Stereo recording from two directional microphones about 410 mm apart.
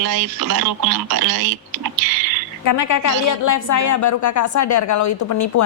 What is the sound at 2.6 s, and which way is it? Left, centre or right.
A woman's voice, left.